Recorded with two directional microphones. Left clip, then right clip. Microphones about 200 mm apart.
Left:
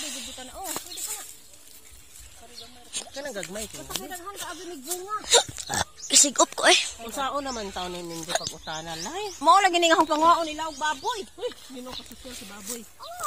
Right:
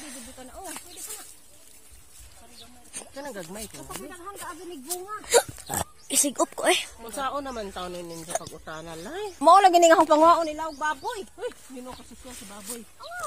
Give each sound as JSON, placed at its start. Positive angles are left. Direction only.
{"t": 3.2, "sound": "speech", "side_deg": -40}
{"t": 3.9, "sound": "speech", "side_deg": 0}
{"t": 5.2, "sound": "speech", "side_deg": -25}
{"t": 6.0, "sound": "speech", "side_deg": -15}
{"t": 7.2, "sound": "speech", "side_deg": 20}
{"t": 7.7, "sound": "speech", "side_deg": 35}
{"t": 9.4, "sound": "speech", "side_deg": -60}
{"t": 11.3, "sound": "speech", "side_deg": 0}